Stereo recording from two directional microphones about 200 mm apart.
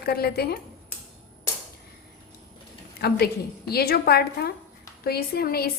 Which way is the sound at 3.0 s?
50° left (ahead or behind).